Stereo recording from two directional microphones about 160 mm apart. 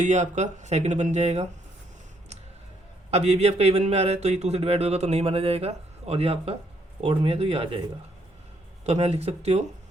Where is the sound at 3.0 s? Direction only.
40° right (ahead or behind).